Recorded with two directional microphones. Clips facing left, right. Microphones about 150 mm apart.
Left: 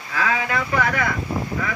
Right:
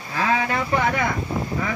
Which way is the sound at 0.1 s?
30° right (ahead or behind).